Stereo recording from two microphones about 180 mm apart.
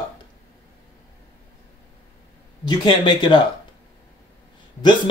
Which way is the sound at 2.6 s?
25° left (ahead or behind).